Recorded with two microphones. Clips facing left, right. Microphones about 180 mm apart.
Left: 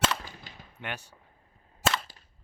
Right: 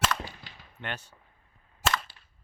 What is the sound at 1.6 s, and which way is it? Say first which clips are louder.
Cap gun: left 1 dB; 35° left (ahead or behind).